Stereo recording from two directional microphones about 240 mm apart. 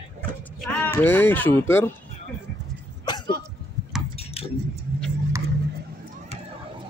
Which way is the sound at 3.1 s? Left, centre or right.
Centre.